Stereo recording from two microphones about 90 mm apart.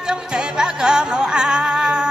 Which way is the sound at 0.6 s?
5° right (ahead or behind).